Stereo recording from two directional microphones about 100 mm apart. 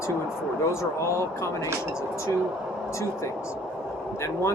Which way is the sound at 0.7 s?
30° left (ahead or behind).